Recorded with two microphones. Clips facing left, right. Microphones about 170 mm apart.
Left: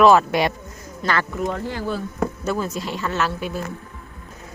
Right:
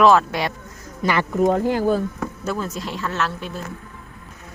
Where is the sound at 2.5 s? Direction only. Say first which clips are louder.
Left 2 dB; centre (ahead or behind).